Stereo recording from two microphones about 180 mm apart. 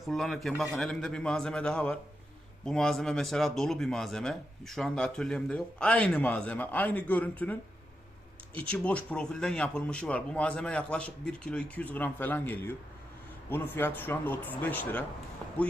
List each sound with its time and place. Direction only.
0.0 s speech: centre (ahead or behind)
8.5 s speech: 5° left (ahead or behind)